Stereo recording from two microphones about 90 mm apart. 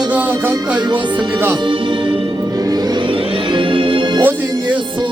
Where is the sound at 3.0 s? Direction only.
65° right (ahead or behind).